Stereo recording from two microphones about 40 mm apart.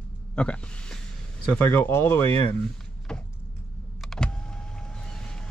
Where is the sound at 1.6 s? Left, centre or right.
Left.